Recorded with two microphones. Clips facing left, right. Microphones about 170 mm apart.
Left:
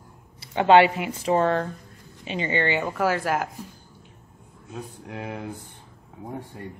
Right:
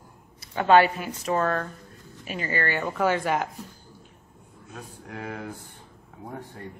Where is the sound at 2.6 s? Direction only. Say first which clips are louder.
Even; 10° left (ahead or behind).